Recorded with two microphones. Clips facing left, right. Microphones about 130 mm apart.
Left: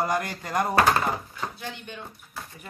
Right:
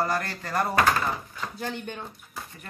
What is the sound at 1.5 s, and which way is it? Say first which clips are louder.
Speech: right 4 dB; 45° right (ahead or behind).